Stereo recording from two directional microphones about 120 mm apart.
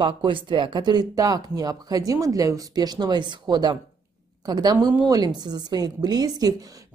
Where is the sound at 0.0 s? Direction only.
45° right (ahead or behind).